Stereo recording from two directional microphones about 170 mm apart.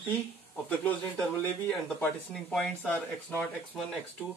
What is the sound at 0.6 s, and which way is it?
Speech, 10° left (ahead or behind).